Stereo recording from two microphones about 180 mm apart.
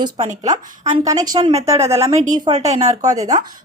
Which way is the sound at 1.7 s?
15° right (ahead or behind).